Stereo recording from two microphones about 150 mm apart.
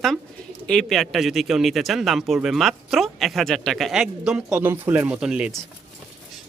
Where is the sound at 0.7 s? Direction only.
Centre (ahead or behind).